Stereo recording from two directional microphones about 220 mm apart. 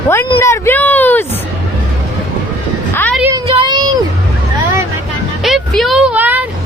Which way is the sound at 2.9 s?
10° left (ahead or behind).